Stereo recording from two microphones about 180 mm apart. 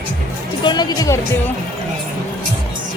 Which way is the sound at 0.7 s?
25° left (ahead or behind).